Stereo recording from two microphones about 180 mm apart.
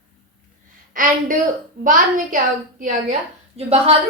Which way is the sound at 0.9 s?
45° right (ahead or behind).